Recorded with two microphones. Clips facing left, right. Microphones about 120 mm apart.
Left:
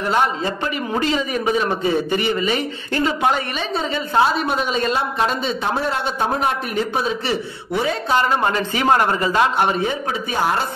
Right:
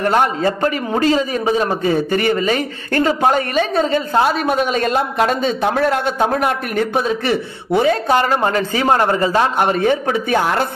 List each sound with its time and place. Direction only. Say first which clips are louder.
0.0 s speech: right 4 dB; 50° right (ahead or behind); by 1.7 s 35° right (ahead or behind)
1.9 s speech: right 3 dB; 45° right (ahead or behind)
8.9 s a man's voice: right 3 dB; 30° right (ahead or behind)
9.8 s speech: right 7 dB; 70° right (ahead or behind)